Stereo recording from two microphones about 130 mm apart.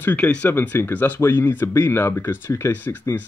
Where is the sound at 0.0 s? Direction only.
10° left (ahead or behind).